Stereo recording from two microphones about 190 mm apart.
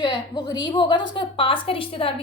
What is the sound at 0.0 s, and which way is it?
A woman's voice, 25° left (ahead or behind).